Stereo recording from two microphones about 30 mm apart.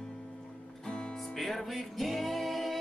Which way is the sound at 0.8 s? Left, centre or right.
Left.